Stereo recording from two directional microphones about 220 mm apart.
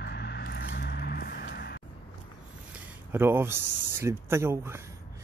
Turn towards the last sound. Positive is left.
turn(degrees=-10)  # may be behind; listen again after turning